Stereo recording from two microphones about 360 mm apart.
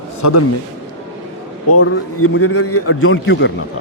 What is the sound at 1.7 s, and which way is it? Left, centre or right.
A man's voice, left.